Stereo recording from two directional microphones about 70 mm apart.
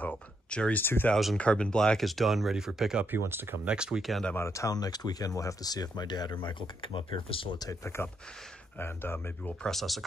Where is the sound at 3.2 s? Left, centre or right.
Right.